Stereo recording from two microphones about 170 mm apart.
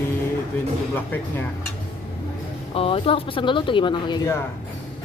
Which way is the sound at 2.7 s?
35° left (ahead or behind).